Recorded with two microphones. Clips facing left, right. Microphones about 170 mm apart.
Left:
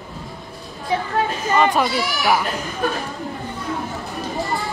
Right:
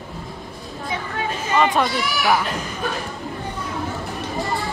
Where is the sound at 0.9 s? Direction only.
35° left (ahead or behind).